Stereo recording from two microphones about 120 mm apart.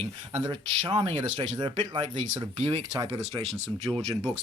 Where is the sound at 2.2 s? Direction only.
60° right (ahead or behind).